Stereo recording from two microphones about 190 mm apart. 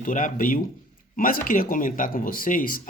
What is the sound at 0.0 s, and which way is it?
Speech, 45° left (ahead or behind).